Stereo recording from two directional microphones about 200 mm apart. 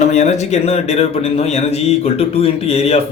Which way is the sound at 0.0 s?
35° left (ahead or behind).